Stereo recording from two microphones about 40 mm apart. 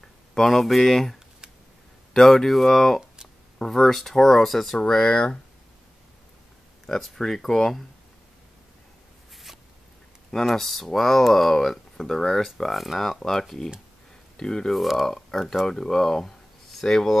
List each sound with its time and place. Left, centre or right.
0.0 s speech: centre
2.1 s speech: centre
4.7 s speech: left
6.9 s speech: centre
9.3 s a sound: centre
10.4 s speech: centre
13.0 s speech: centre
14.7 s speech: centre
15.0 s speech: centre